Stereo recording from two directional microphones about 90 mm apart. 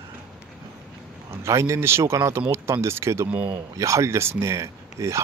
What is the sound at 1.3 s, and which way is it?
Speech, 30° right (ahead or behind).